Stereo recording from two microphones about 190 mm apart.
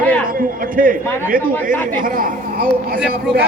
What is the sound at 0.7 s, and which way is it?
A man's voice, 45° right (ahead or behind).